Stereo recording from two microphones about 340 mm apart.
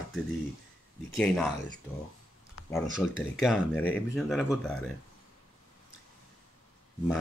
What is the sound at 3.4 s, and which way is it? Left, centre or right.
Speech, centre.